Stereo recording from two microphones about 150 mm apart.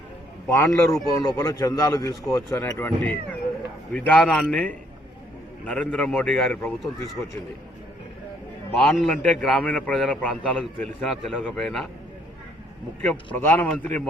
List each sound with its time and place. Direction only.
0.4 s a man's voice: 20° left (ahead or behind)
8.7 s a man's voice: 5° left (ahead or behind)
13.0 s a man's voice: 10° left (ahead or behind)